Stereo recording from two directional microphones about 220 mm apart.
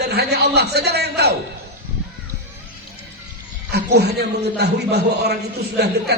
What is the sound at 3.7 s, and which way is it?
A man's voice, 50° right (ahead or behind).